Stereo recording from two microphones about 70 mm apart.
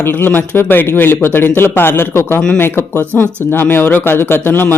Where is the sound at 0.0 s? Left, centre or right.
Left.